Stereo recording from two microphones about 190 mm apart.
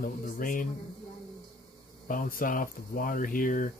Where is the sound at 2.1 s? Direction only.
45° left (ahead or behind).